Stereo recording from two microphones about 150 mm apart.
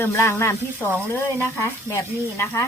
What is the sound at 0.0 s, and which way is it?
Speech, 15° left (ahead or behind).